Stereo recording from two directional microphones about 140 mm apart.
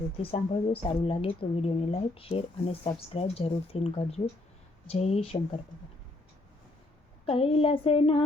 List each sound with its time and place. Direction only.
0.2 s speech: 40° left (ahead or behind)
7.3 s speech: 45° left (ahead or behind)